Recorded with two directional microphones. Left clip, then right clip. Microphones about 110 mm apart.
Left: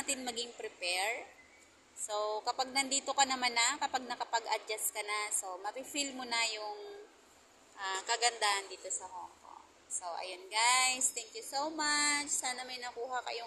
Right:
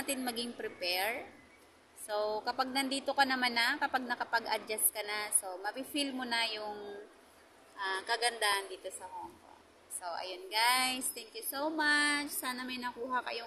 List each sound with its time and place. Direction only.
0.0 s a woman's voice: 25° right (ahead or behind)
7.8 s a woman's voice: 25° right (ahead or behind)
10.0 s a woman's voice: 30° right (ahead or behind)